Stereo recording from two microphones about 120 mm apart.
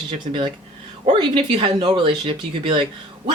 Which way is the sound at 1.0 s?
40° right (ahead or behind).